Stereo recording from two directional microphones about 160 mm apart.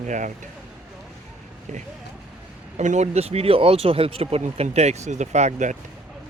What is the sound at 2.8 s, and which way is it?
Speech, 45° right (ahead or behind).